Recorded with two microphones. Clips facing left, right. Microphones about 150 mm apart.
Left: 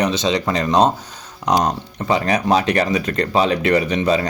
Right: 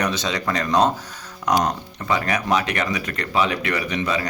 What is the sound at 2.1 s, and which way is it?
Speech, 30° left (ahead or behind).